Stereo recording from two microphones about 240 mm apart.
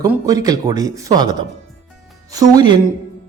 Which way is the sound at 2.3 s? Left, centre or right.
Centre.